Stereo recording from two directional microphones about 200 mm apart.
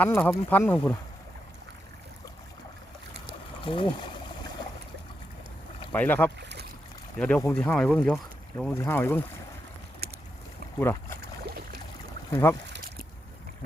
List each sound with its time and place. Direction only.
0.0 s speech: 10° left (ahead or behind)
3.6 s speech: 25° left (ahead or behind)
5.9 s speech: 10° left (ahead or behind)
6.4 s boat: 60° right (ahead or behind)
7.2 s speech: 5° left (ahead or behind)
10.0 s boat: 50° right (ahead or behind)
10.8 s speech: 10° left (ahead or behind)
12.3 s speech: 10° left (ahead or behind)